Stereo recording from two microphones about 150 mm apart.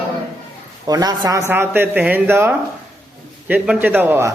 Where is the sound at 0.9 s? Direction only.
25° right (ahead or behind).